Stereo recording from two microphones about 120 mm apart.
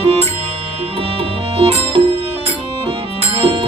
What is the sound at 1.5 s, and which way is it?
Music, 55° right (ahead or behind).